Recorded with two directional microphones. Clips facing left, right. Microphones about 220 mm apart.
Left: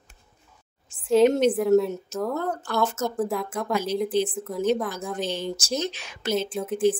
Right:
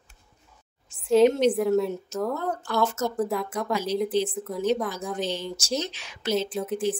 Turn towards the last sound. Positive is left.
turn(degrees=0)  # may be behind; listen again after turning